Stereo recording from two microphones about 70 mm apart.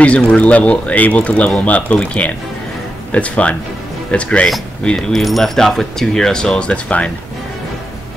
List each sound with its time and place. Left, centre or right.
0.0 s speech: centre
5.1 s speech: centre